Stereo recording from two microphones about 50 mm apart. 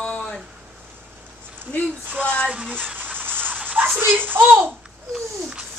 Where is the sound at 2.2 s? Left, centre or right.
Left.